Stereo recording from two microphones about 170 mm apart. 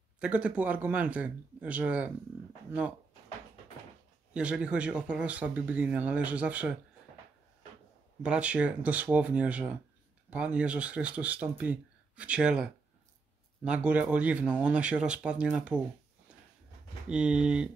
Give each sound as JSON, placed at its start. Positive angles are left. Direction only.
{"t": 0.2, "sound": "speech", "side_deg": -5}
{"t": 4.3, "sound": "speech", "side_deg": -5}
{"t": 8.2, "sound": "speech", "side_deg": -5}
{"t": 17.1, "sound": "speech", "side_deg": -5}